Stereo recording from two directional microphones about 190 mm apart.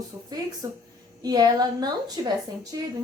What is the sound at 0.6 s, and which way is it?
A woman's voice, 15° right (ahead or behind).